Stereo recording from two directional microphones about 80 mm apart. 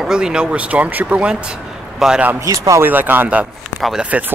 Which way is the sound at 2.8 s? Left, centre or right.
Right.